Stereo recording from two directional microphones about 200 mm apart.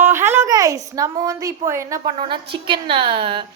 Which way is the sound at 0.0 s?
10° right (ahead or behind).